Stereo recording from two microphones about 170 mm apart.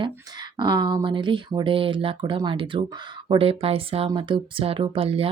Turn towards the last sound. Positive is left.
turn(degrees=-35)  # may be behind; listen again after turning